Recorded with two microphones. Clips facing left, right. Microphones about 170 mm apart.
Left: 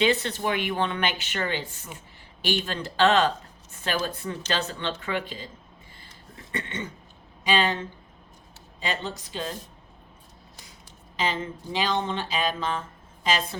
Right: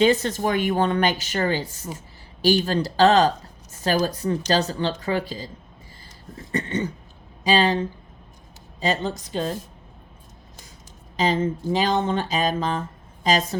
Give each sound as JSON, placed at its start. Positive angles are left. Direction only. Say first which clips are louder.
{"t": 0.0, "sound": "speech", "louder": "right 5 dB", "side_deg": -40}
{"t": 6.3, "sound": "cough", "louder": "right 8 dB", "side_deg": -40}
{"t": 7.4, "sound": "speech", "louder": "right 5 dB", "side_deg": -35}
{"t": 11.2, "sound": "speech", "louder": "right 7 dB", "side_deg": -40}